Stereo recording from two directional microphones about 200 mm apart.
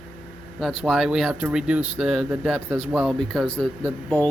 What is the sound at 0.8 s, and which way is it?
Speech, centre (ahead or behind).